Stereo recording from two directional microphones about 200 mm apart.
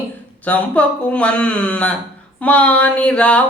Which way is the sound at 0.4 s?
5° left (ahead or behind).